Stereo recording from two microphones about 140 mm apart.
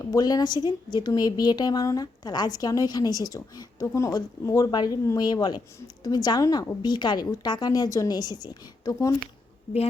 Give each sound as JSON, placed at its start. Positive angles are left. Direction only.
{"t": 0.0, "sound": "a woman's voice", "side_deg": 25}